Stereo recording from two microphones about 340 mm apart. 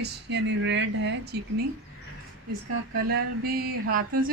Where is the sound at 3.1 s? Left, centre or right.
Right.